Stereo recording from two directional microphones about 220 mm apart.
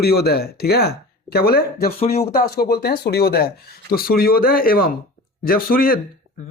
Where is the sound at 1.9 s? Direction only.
25° left (ahead or behind).